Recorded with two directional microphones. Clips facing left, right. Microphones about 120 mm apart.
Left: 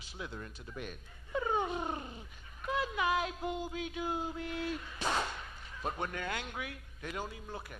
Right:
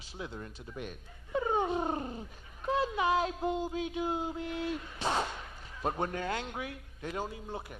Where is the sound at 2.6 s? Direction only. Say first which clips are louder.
Right 4 dB; 30° right (ahead or behind).